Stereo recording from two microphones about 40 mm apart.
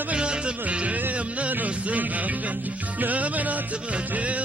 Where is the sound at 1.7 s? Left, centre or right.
Right.